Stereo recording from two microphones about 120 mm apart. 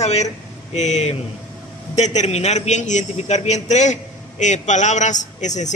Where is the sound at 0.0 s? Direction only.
65° left (ahead or behind).